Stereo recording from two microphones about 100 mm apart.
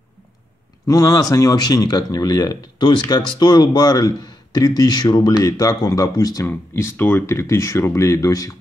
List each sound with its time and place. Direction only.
0.8 s speech: 35° left (ahead or behind)
6.4 s speech: 25° left (ahead or behind)